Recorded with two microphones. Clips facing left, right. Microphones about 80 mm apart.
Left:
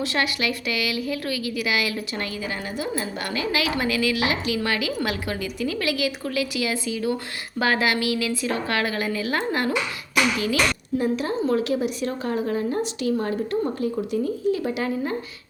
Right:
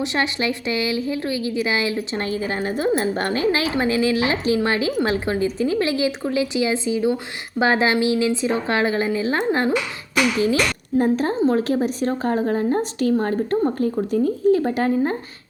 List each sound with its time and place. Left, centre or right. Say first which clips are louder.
0.0 s a woman's voice: right 2 dB; right
3.0 s a woman's voice: right 7 dB; right
10.9 s a woman's voice: right 6 dB; right